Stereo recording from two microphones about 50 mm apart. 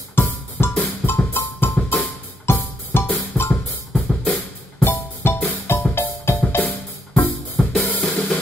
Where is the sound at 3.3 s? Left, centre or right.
Left.